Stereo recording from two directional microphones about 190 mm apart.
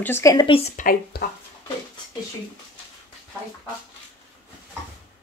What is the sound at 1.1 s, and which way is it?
Speech, 55° left (ahead or behind).